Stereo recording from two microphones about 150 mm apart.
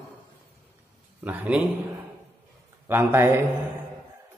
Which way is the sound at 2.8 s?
15° right (ahead or behind).